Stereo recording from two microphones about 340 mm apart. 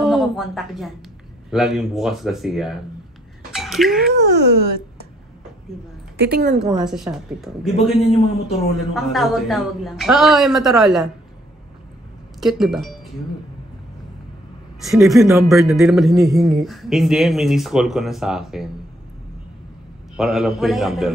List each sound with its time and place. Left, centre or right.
0.0 s a man's voice: centre
4.1 s speech: right
6.1 s speech: right
6.6 s a man's voice: centre
12.4 s a man's voice: centre
14.8 s a man's voice: centre
20.2 s a man's voice: centre